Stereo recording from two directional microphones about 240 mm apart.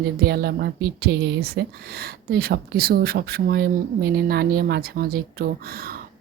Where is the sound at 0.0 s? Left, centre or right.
Right.